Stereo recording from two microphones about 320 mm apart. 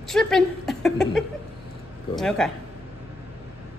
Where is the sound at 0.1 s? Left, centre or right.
Centre.